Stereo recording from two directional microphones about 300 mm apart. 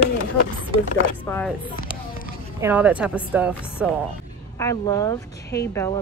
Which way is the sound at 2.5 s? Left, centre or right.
Centre.